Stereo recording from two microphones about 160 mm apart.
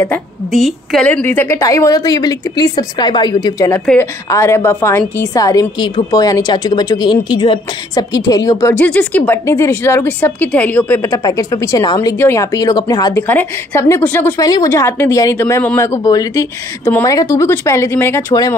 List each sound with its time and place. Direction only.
0.5 s a woman's voice: centre (ahead or behind); by 3.8 s 20° left (ahead or behind)
3.8 s a woman's voice: 5° left (ahead or behind)
8.7 s a woman's voice: 10° left (ahead or behind)
14.4 s a woman's voice: 20° left (ahead or behind)